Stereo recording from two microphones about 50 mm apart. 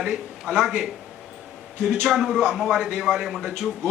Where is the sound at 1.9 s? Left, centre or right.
Centre.